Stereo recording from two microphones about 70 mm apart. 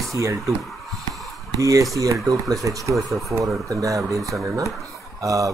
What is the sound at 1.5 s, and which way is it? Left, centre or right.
Speech, right.